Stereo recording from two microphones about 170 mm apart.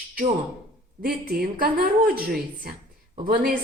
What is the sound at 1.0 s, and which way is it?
A woman's voice, 60° right (ahead or behind).